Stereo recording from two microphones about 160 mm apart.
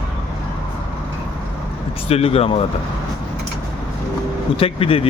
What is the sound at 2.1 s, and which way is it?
Speech, 40° left (ahead or behind).